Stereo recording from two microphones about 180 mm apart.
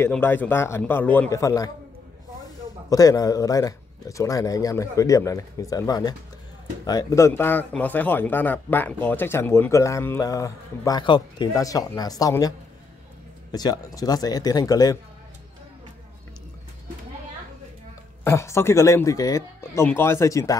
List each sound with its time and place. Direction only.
0.0 s speech: 10° left (ahead or behind)
2.9 s speech: 20° left (ahead or behind)
18.2 s speech: 15° left (ahead or behind)